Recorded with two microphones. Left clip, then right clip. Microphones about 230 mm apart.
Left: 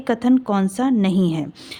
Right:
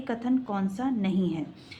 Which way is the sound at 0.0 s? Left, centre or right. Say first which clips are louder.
Left 10 dB; left.